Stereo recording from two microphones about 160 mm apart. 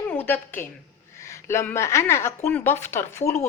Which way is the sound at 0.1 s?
10° left (ahead or behind).